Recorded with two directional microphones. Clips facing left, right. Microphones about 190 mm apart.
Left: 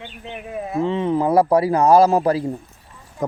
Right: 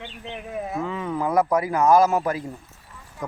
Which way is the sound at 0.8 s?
25° left (ahead or behind).